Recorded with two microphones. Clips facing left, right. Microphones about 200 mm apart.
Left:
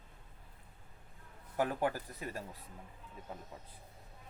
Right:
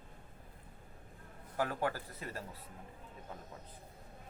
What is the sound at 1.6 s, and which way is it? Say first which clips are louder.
Speech: left 2 dB; 15° left (ahead or behind).